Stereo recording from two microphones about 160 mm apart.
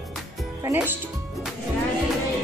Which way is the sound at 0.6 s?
15° right (ahead or behind).